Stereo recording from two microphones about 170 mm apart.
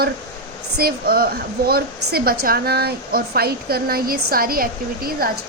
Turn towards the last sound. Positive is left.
turn(degrees=-60)  # may be behind; listen again after turning